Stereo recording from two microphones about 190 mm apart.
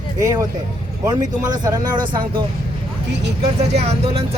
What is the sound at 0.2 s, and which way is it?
Speech, 20° right (ahead or behind).